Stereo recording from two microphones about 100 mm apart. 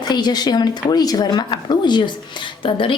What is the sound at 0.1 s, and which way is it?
A woman's voice, 45° left (ahead or behind).